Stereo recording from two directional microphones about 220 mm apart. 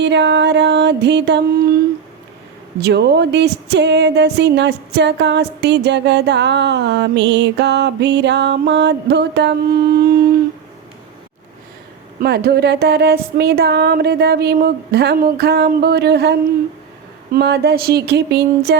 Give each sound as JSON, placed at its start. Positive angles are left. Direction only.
{"t": 0.0, "sound": "music", "side_deg": -50}
{"t": 2.8, "sound": "music", "side_deg": -50}
{"t": 12.2, "sound": "music", "side_deg": -45}